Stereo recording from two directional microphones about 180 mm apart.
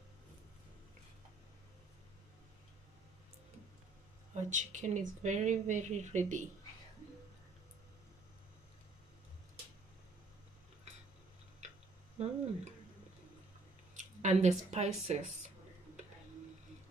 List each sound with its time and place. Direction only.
4.3 s speech: 45° right (ahead or behind)
12.2 s a sound: 35° right (ahead or behind)
13.9 s speech: 40° right (ahead or behind)